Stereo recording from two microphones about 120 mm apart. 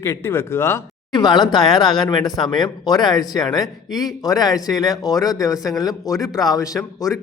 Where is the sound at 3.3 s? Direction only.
30° left (ahead or behind).